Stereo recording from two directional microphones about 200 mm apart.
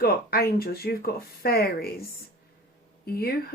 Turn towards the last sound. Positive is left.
turn(degrees=50)  # may be behind; listen again after turning